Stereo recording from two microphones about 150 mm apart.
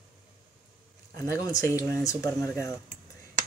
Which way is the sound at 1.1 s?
20° left (ahead or behind).